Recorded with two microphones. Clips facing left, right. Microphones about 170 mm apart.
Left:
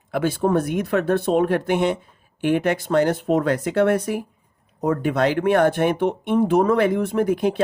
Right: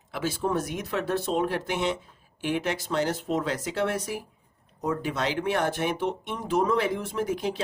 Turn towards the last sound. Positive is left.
turn(degrees=55)  # may be behind; listen again after turning